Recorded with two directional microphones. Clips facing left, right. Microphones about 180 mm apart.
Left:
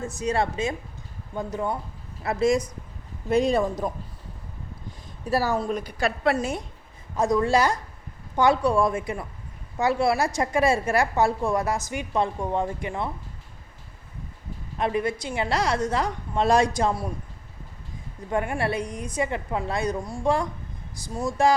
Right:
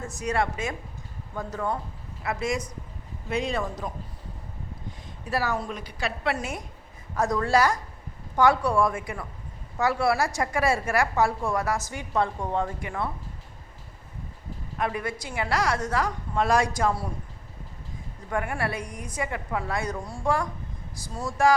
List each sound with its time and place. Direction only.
0.2 s a woman's voice: 25° left (ahead or behind)
2.2 s speech: 30° left (ahead or behind)
5.3 s speech: 30° left (ahead or behind)
5.7 s a woman's voice: 45° left (ahead or behind)
6.3 s a woman's voice: 30° left (ahead or behind)
7.2 s a woman's voice: 15° left (ahead or behind)
14.8 s a woman's voice: 25° left (ahead or behind)
18.3 s a woman's voice: 25° left (ahead or behind)